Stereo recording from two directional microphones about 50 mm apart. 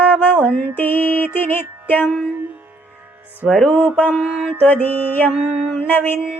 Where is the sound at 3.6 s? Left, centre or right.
Left.